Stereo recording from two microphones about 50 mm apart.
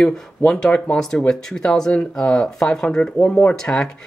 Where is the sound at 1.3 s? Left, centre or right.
Centre.